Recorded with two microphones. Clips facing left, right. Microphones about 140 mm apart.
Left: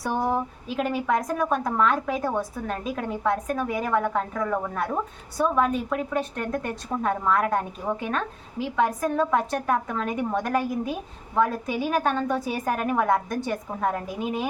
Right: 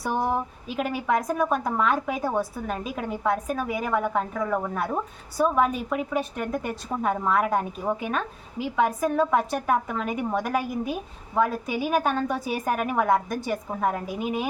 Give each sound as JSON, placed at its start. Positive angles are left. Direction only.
{"t": 0.0, "sound": "a woman's voice", "side_deg": -5}